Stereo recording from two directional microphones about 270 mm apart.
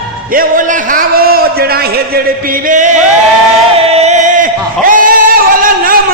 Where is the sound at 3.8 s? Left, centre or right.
Right.